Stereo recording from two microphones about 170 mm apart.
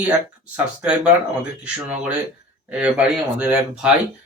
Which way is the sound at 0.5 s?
10° right (ahead or behind).